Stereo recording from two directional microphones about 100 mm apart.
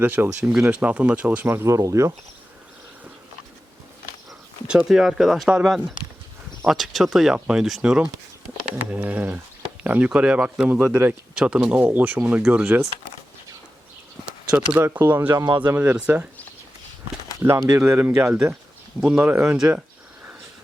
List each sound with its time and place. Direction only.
0.0 s speech: 20° right (ahead or behind)
4.3 s speech: 5° right (ahead or behind)
14.5 s speech: 15° right (ahead or behind)
17.4 s speech: 30° right (ahead or behind)
18.9 s speech: 5° right (ahead or behind)
19.2 s speech: 20° right (ahead or behind)